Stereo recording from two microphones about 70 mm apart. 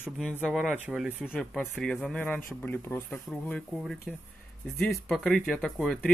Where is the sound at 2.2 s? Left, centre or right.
Left.